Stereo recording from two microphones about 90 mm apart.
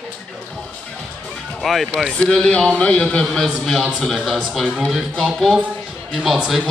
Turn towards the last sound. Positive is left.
turn(degrees=0)  # may be behind; listen again after turning